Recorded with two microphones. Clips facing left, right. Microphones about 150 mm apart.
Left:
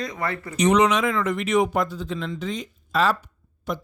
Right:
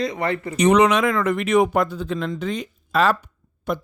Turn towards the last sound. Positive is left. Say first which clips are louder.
# right 4 dB
turn(degrees=-55)  # may be behind; listen again after turning